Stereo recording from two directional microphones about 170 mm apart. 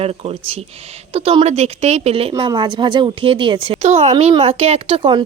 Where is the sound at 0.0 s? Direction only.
35° right (ahead or behind).